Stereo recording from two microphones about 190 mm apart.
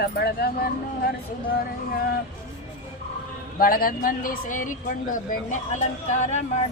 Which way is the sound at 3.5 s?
50° left (ahead or behind).